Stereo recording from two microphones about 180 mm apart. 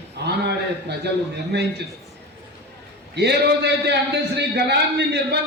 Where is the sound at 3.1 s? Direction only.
65° right (ahead or behind).